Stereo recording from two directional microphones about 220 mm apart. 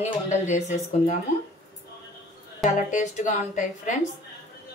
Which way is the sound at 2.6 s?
35° left (ahead or behind).